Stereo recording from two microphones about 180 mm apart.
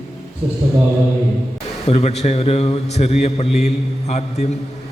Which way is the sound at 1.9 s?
35° left (ahead or behind).